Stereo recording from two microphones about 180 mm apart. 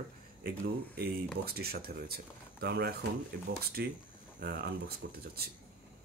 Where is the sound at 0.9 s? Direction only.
60° right (ahead or behind).